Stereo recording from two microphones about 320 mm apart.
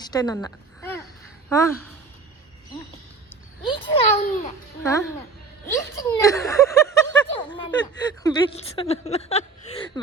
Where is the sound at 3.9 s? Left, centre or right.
Left.